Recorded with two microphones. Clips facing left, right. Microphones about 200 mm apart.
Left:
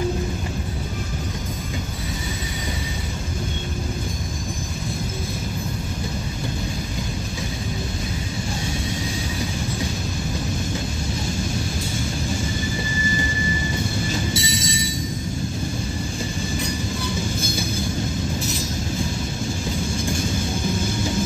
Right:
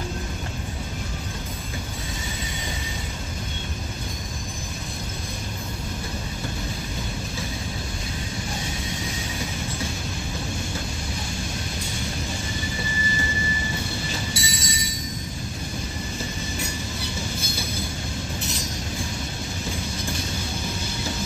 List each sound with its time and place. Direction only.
14.3 s music: 25° left (ahead or behind)